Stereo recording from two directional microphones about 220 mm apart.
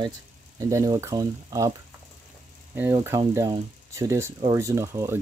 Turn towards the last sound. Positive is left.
turn(degrees=-15)  # may be behind; listen again after turning